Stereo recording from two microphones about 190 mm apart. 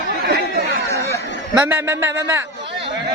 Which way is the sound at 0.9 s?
15° left (ahead or behind).